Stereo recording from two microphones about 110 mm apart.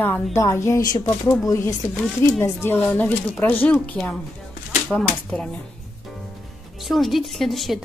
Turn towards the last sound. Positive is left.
turn(degrees=0)  # may be behind; listen again after turning